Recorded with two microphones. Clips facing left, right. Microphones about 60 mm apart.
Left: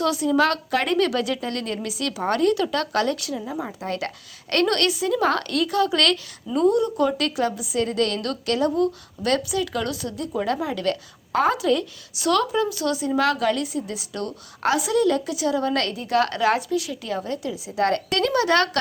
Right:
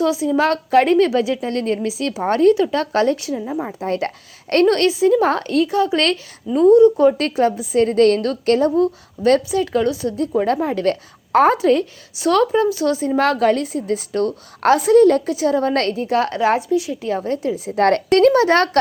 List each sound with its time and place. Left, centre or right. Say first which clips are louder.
0.0 s a woman's voice: right 3 dB; centre
17.7 s a woman's voice: right 7 dB; right